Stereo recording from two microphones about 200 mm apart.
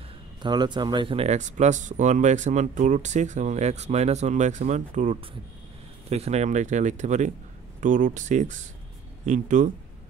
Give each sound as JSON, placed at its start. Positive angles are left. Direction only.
{"t": 0.4, "sound": "speech", "side_deg": -20}